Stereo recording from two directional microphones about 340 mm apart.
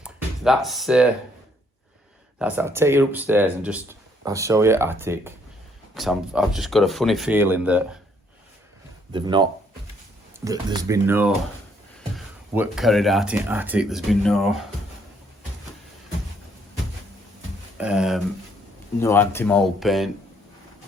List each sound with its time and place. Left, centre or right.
0.0 s a sound: centre
2.4 s speech: centre
9.1 s speech: centre
17.7 s speech: centre